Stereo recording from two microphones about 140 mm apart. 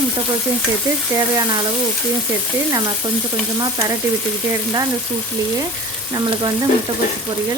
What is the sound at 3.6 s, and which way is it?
Speech, 25° right (ahead or behind).